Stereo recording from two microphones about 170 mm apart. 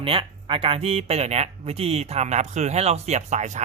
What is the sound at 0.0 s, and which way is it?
Speech, 30° right (ahead or behind).